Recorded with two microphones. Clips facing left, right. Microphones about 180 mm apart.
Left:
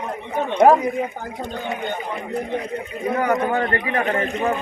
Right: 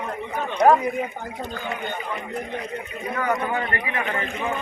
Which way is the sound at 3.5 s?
40° left (ahead or behind).